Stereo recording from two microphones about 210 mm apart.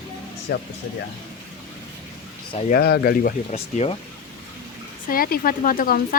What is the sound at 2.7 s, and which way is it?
Speech, 50° left (ahead or behind).